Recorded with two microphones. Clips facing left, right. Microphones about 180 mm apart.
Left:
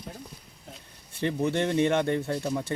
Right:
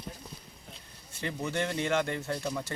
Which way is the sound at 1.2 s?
25° left (ahead or behind).